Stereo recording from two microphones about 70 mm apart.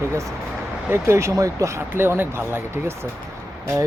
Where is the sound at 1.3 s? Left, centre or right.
Right.